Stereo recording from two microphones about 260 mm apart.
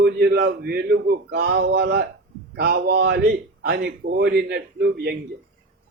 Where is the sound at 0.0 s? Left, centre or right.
Right.